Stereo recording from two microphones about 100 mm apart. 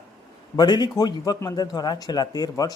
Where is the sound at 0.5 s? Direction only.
45° left (ahead or behind).